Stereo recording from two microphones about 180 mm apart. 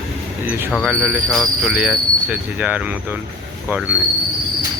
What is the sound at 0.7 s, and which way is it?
Speech, centre (ahead or behind).